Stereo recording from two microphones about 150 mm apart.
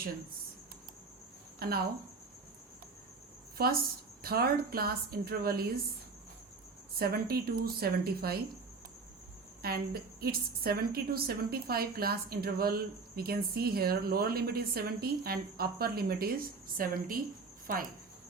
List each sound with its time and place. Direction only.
1.5 s speech: 90° right
3.6 s a woman's voice: 90° right
7.0 s a woman's voice: 90° right
9.6 s a woman's voice: 90° right